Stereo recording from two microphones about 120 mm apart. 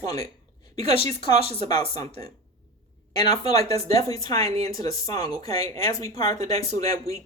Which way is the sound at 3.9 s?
55° right (ahead or behind).